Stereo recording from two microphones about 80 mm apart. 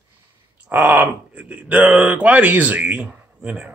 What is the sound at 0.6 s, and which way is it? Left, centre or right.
Speech, centre.